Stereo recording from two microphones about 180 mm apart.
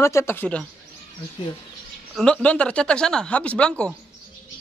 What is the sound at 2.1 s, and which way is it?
Speech, 5° left (ahead or behind).